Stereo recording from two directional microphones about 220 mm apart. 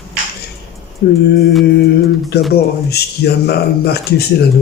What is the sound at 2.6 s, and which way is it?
Speech, 45° left (ahead or behind).